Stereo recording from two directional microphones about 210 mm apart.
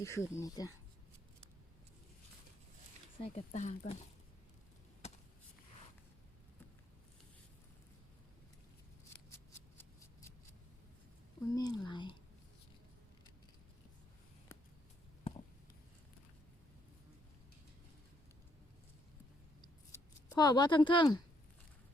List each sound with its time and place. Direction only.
0.0 s speech: 15° left (ahead or behind)
3.2 s speech: 35° left (ahead or behind)
11.5 s speech: 20° left (ahead or behind)
15.3 s a sound: 30° left (ahead or behind)
19.6 s scissors: 20° left (ahead or behind)